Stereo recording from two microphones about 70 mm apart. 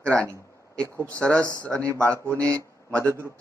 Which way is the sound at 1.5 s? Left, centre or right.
Right.